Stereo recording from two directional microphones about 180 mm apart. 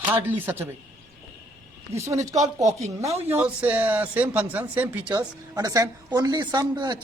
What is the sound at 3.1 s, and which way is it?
Speech, 35° right (ahead or behind).